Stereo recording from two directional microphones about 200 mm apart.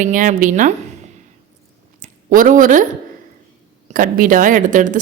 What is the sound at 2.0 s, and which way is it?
Speech, 40° right (ahead or behind).